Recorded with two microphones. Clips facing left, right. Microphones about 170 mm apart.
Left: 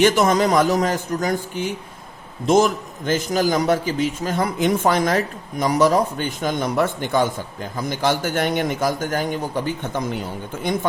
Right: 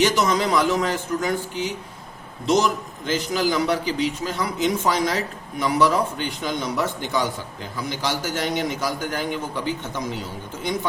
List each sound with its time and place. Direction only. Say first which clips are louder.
0.0 s a man's voice: left 4 dB; 50° left (ahead or behind)